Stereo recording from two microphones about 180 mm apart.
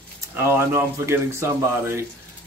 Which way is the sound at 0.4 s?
15° right (ahead or behind).